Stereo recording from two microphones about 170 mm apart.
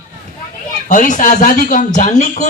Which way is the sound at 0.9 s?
50° left (ahead or behind).